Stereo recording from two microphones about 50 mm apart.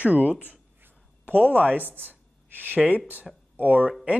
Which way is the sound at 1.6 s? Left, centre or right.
Right.